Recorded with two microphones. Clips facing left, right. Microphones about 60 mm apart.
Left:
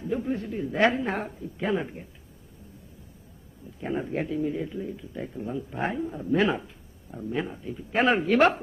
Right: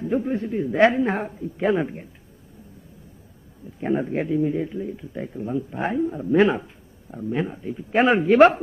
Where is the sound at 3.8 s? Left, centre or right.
Right.